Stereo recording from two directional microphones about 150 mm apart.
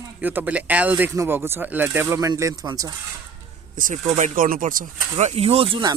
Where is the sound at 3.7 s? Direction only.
60° right (ahead or behind).